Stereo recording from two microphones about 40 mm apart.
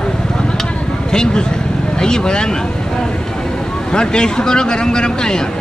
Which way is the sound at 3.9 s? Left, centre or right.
Left.